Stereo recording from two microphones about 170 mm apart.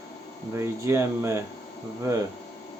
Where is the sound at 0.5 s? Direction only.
15° right (ahead or behind).